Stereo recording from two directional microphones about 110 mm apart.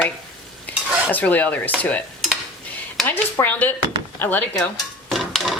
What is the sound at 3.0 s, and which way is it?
Speech, 15° left (ahead or behind).